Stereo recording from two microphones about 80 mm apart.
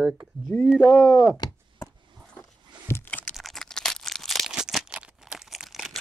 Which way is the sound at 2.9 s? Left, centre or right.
Left.